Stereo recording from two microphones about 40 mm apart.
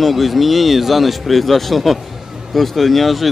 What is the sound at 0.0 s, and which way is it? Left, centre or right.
Speech, centre.